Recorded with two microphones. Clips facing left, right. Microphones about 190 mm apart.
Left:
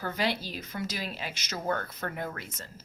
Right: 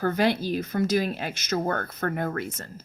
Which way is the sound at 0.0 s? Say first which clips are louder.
Right 8 dB; 50° right (ahead or behind).